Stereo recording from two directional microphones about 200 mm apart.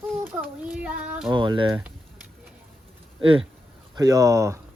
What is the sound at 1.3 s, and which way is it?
Speech, 20° right (ahead or behind).